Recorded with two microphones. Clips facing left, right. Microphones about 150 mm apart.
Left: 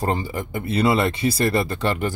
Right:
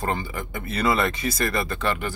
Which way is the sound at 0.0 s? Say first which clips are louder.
Left 4 dB; 35° left (ahead or behind).